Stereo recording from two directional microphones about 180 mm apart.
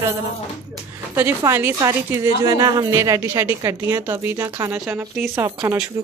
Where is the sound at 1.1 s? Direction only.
15° right (ahead or behind).